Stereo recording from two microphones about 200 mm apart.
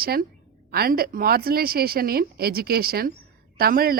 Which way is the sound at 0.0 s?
50° right (ahead or behind).